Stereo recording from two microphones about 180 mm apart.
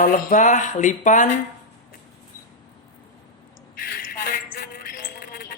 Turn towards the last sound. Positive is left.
turn(degrees=55)  # may be behind; listen again after turning